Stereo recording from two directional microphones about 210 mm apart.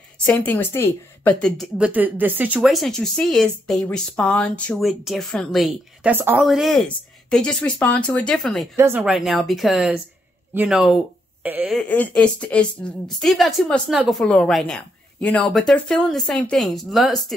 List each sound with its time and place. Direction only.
0.3 s a woman's voice: 10° left (ahead or behind)
8.7 s a woman's voice: 10° right (ahead or behind)
11.8 s a woman's voice: 5° left (ahead or behind)